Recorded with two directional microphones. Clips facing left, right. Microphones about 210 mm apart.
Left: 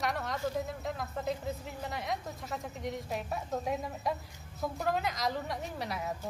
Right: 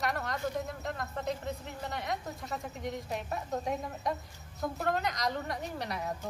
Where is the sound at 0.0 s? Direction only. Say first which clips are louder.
Even; centre (ahead or behind).